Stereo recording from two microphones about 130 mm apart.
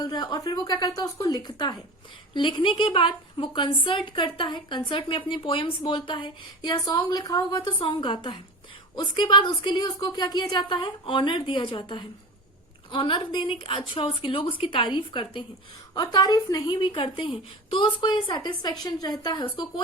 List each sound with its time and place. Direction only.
0.0 s a woman's voice: 30° left (ahead or behind)